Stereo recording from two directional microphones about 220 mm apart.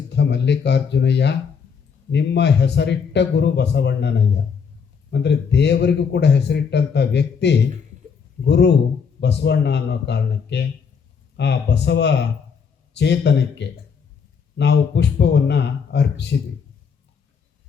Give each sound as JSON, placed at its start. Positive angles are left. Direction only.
{"t": 0.1, "sound": "speech", "side_deg": 50}
{"t": 5.1, "sound": "speech", "side_deg": 50}